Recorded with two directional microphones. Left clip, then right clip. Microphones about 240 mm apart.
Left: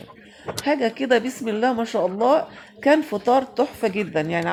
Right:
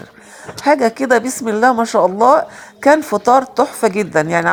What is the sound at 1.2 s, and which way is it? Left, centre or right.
Speech, centre.